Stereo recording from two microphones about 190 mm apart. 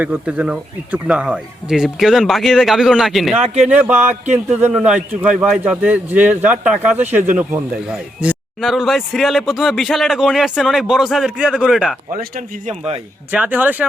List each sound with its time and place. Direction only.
0.0 s a man's voice: 5° right (ahead or behind)
3.3 s a man's voice: 35° right (ahead or behind)
3.7 s a man's voice: 10° right (ahead or behind)
12.6 s a man's voice: 35° right (ahead or behind)
13.3 s speech: 10° right (ahead or behind)